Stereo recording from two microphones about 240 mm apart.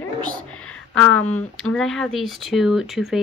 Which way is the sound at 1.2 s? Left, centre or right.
Centre.